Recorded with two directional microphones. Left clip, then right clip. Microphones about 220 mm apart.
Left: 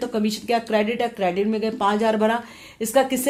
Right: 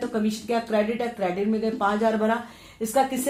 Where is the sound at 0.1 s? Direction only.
45° left (ahead or behind).